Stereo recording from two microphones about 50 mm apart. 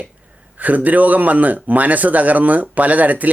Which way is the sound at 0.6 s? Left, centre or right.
Right.